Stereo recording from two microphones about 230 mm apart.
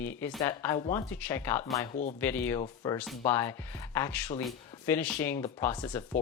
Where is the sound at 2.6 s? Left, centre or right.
Left.